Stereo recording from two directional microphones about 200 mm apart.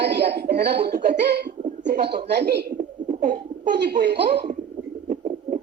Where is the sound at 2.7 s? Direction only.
40° right (ahead or behind).